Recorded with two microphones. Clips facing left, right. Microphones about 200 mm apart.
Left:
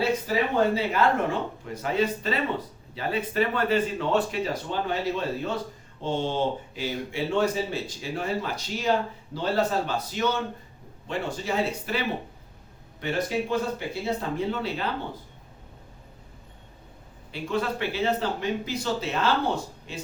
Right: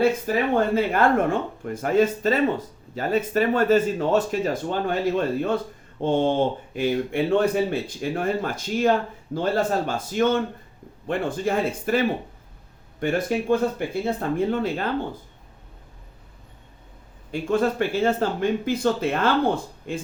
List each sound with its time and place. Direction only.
0.3 s speech: 50° right (ahead or behind)
17.3 s speech: 45° right (ahead or behind)